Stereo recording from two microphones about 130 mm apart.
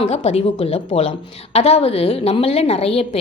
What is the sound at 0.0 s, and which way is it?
A woman's voice, 50° left (ahead or behind).